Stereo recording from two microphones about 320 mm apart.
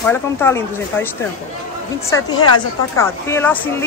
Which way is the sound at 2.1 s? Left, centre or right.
Centre.